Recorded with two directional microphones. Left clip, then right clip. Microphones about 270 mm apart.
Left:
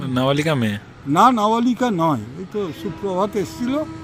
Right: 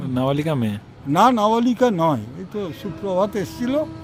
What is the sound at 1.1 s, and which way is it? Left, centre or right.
Speech, centre.